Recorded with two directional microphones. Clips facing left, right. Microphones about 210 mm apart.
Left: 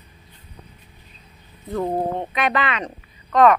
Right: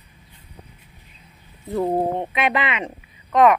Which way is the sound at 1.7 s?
15° right (ahead or behind).